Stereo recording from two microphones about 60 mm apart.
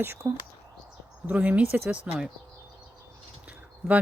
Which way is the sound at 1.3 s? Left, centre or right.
Right.